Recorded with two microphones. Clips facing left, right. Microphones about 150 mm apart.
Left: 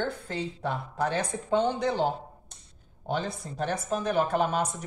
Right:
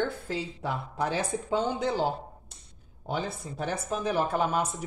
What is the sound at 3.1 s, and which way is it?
Speech, 10° right (ahead or behind).